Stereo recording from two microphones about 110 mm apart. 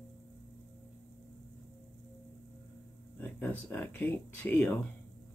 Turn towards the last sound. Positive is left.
turn(degrees=15)  # may be behind; listen again after turning